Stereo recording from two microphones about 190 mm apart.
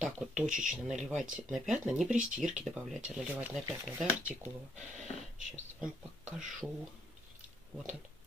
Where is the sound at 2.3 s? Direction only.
40° right (ahead or behind).